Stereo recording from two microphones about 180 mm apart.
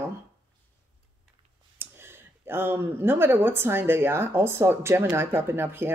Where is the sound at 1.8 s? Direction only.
10° right (ahead or behind).